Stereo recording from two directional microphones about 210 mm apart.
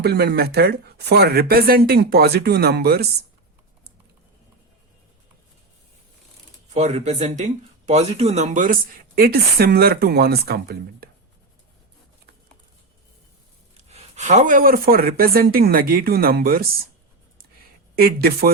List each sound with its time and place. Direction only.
0.0 s speech: 50° right (ahead or behind)
6.7 s speech: 30° right (ahead or behind); by 11.1 s 50° right (ahead or behind)
13.9 s speech: 35° right (ahead or behind)
17.9 s speech: 45° right (ahead or behind)